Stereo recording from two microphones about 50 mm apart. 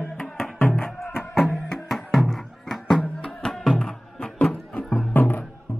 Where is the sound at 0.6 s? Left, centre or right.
Left.